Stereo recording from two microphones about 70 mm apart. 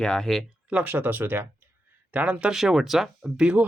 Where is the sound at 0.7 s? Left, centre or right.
Right.